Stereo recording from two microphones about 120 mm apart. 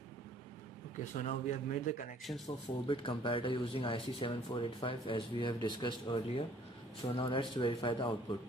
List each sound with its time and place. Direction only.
0.9 s speech: 70° left (ahead or behind); by 2.0 s 90° left
2.3 s speech: 20° left (ahead or behind)
2.9 s speech: 45° left (ahead or behind)